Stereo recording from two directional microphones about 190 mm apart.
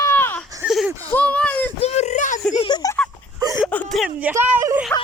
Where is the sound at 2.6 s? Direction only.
20° left (ahead or behind).